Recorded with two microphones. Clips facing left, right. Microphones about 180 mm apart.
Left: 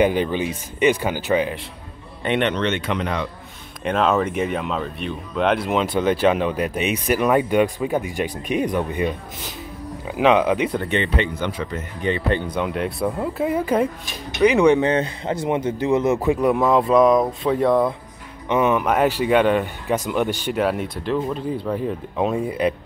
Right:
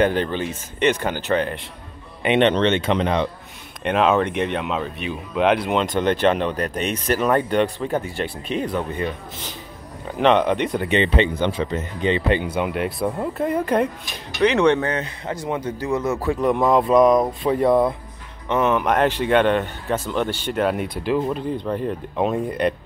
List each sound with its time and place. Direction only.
0.0 s speech: 10° left (ahead or behind)
2.2 s speech: 25° right (ahead or behind)
3.8 s speech: centre (ahead or behind)
10.9 s speech: 20° right (ahead or behind)
12.4 s speech: 5° right (ahead or behind); by 14.9 s 10° left (ahead or behind)
14.9 s a man's voice: 25° left (ahead or behind)
16.3 s speech: 5° left (ahead or behind)
18.5 s speech: 10° left (ahead or behind)